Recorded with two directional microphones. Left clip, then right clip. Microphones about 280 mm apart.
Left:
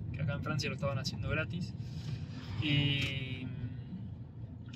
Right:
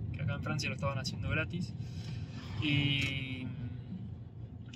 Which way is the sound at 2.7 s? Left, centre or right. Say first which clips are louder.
Right 1 dB; centre.